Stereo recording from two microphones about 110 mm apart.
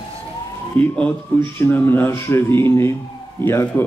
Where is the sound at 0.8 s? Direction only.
10° left (ahead or behind).